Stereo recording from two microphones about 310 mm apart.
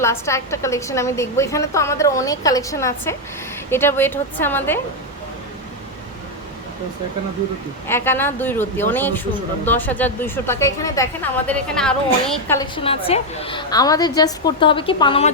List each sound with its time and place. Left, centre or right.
0.0 s a woman's voice: centre
7.9 s a woman's voice: centre
12.5 s a woman's voice: centre